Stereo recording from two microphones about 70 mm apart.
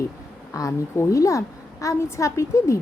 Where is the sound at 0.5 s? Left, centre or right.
Left.